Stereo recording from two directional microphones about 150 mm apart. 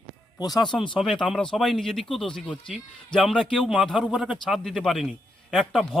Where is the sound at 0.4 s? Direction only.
25° left (ahead or behind).